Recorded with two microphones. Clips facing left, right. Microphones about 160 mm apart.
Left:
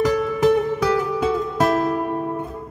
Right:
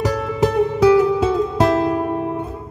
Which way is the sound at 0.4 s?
20° right (ahead or behind).